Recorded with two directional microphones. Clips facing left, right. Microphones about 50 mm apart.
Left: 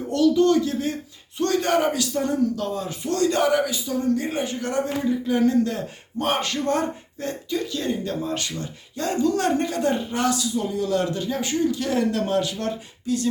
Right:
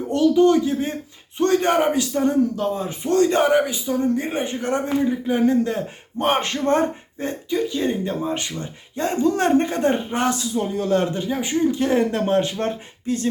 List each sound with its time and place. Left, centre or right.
0.1 s speech: right